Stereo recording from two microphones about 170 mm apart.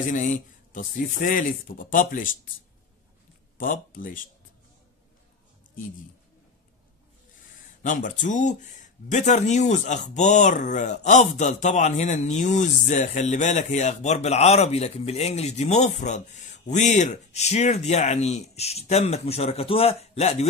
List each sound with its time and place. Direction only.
0.7 s speech: 50° left (ahead or behind)
3.5 s speech: 50° left (ahead or behind)
7.8 s speech: 50° left (ahead or behind)